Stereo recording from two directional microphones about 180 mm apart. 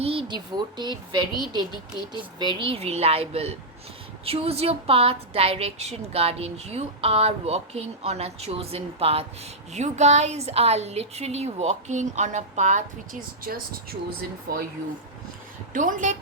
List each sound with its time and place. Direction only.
0.0 s speech: 30° right (ahead or behind)
2.4 s a woman's voice: 25° right (ahead or behind); by 14.6 s 55° right (ahead or behind)
15.7 s a woman's voice: 45° right (ahead or behind)